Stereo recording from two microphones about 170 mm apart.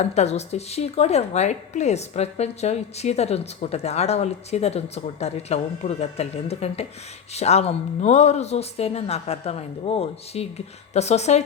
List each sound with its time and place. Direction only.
0.0 s speech: 40° left (ahead or behind)